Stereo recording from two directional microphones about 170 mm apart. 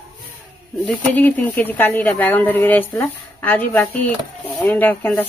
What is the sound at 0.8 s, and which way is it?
A woman's voice, 10° left (ahead or behind).